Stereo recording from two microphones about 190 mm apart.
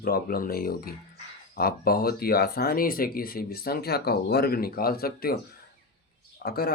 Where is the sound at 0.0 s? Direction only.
50° left (ahead or behind).